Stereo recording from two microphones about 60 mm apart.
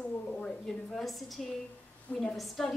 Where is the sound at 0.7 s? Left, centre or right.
Centre.